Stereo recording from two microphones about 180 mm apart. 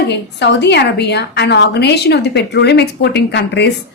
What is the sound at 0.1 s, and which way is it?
A woman's voice, 70° left (ahead or behind).